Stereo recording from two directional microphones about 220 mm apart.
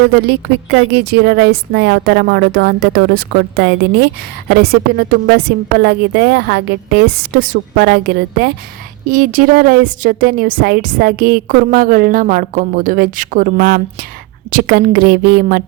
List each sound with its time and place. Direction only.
0.2 s a woman's voice: 45° right (ahead or behind)